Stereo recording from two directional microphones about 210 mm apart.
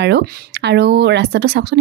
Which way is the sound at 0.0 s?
55° right (ahead or behind).